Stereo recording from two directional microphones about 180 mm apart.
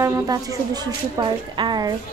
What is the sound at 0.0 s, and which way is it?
Speech, 20° right (ahead or behind).